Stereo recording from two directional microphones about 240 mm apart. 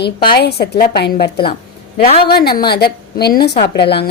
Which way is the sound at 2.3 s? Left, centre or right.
Left.